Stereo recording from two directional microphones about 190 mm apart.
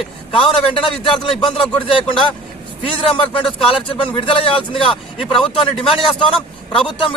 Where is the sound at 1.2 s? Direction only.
25° left (ahead or behind).